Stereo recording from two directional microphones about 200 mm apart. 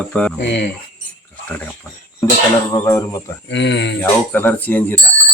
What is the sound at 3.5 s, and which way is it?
Speech, 60° left (ahead or behind).